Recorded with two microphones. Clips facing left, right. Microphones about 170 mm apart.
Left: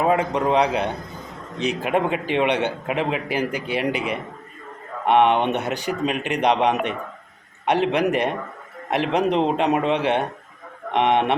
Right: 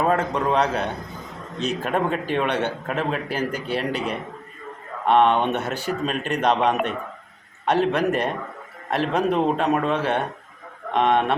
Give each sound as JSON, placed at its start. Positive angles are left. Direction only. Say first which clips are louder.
{"t": 0.0, "sound": "speech", "louder": "left 2 dB", "side_deg": 10}